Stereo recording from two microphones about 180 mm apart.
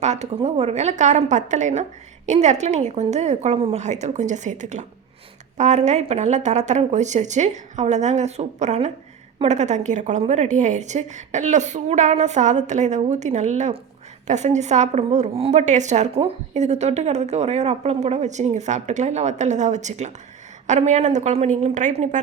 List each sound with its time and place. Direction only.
0.0 s a woman's voice: 40° right (ahead or behind)